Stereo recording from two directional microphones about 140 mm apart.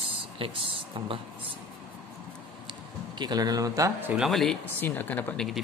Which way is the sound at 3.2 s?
30° right (ahead or behind).